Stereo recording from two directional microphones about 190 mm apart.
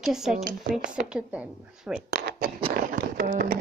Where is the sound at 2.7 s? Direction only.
50° right (ahead or behind).